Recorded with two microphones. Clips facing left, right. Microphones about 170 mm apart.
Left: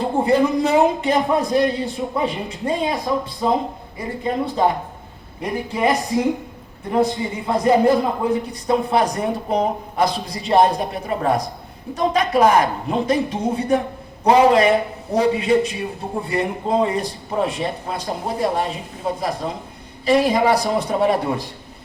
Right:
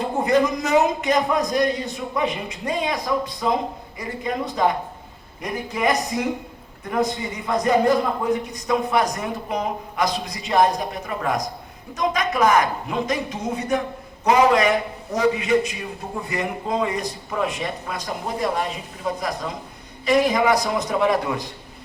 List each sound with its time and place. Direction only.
0.2 s a man's voice: 30° left (ahead or behind)